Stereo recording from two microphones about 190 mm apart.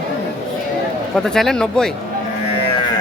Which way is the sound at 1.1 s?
5° left (ahead or behind).